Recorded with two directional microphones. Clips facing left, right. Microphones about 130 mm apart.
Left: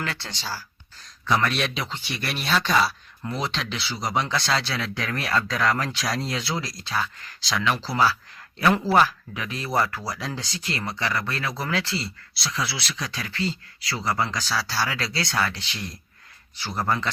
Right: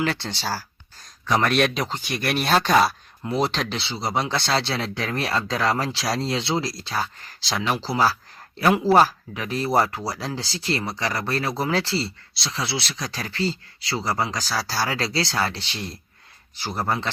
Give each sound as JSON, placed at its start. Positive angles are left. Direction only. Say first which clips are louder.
{"t": 0.0, "sound": "speech", "louder": "right 7 dB", "side_deg": -30}
{"t": 1.5, "sound": "speech", "louder": "right 6 dB", "side_deg": -50}
{"t": 3.8, "sound": "speech", "louder": "left 1 dB", "side_deg": -25}
{"t": 8.9, "sound": "speech", "louder": "right 3 dB", "side_deg": -35}